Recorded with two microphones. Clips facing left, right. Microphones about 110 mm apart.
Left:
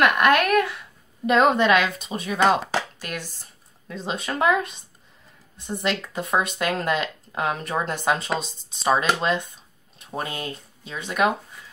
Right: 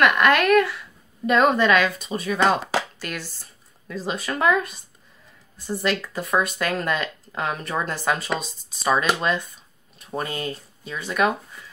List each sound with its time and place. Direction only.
0.0 s speech: 15° left (ahead or behind)